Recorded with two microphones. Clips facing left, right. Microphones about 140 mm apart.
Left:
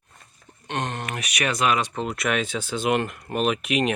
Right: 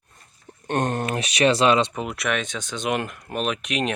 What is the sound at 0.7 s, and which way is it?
Speech, 45° right (ahead or behind).